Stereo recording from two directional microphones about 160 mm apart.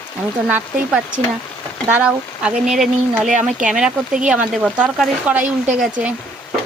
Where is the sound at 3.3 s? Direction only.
50° right (ahead or behind).